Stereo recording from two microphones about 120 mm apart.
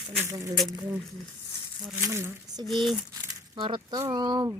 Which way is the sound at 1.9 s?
20° right (ahead or behind).